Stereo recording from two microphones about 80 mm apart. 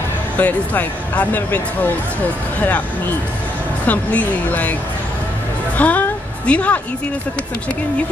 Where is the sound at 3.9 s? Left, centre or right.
Centre.